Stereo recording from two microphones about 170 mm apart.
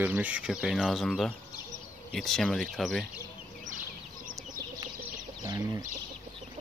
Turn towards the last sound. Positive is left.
turn(degrees=-20)  # may be behind; listen again after turning